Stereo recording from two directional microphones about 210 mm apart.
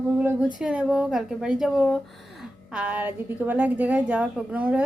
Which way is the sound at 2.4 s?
5° right (ahead or behind).